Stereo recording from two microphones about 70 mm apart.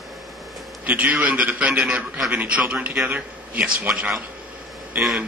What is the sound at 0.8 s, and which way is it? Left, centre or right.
A man's voice, right.